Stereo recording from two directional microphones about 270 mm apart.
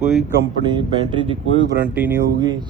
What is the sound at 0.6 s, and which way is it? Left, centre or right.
Speech, centre.